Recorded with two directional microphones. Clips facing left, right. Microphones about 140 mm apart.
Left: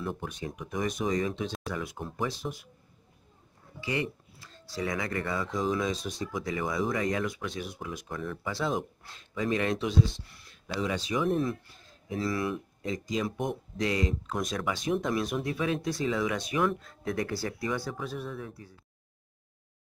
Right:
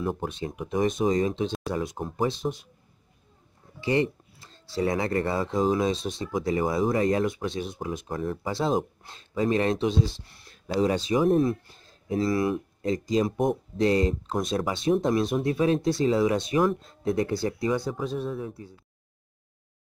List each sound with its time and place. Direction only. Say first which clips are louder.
0.0 s speech: right 6 dB; 40° right (ahead or behind)
0.6 s speech: right 7 dB; 25° right (ahead or behind)
2.2 s speech: right 7 dB; 25° right (ahead or behind)
3.8 s speech: right 8 dB; 30° right (ahead or behind)
8.1 s speech: right 4 dB; 35° right (ahead or behind)